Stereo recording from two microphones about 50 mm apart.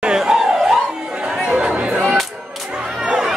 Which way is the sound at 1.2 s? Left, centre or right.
Centre.